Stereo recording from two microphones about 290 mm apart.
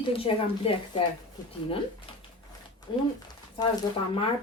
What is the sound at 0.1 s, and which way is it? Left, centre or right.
Speech, centre.